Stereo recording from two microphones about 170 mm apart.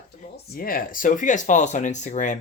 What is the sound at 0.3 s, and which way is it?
Speech, 60° left (ahead or behind).